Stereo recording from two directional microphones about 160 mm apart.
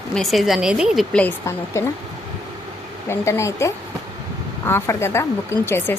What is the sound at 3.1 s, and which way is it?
Speech, 15° left (ahead or behind).